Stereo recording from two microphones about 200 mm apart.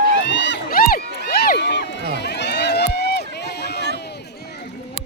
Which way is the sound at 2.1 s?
60° left (ahead or behind).